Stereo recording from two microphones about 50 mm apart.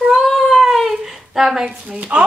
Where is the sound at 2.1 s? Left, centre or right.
Right.